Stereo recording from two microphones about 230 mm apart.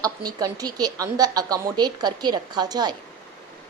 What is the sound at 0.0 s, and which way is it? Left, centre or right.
Speech, centre.